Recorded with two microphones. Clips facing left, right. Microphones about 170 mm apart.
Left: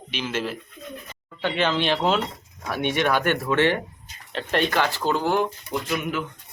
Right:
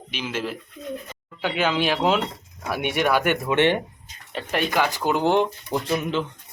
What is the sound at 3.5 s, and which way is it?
Speech, 20° right (ahead or behind).